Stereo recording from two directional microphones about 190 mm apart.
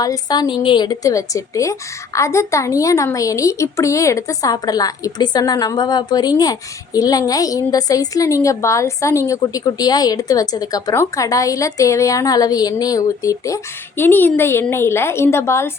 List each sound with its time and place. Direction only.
0.0 s a woman's voice: 20° left (ahead or behind)